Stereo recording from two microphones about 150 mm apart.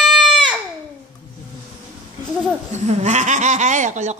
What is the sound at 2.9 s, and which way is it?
Speech, 50° right (ahead or behind).